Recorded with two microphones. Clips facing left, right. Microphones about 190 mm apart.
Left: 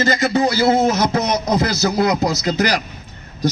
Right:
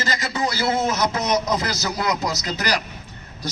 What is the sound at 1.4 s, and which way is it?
Speech, 50° left (ahead or behind).